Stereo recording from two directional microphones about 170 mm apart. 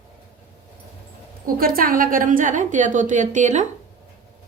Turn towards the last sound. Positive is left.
turn(degrees=-45)  # may be behind; listen again after turning